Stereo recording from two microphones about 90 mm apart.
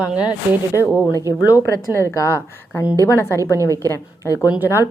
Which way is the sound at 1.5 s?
35° left (ahead or behind).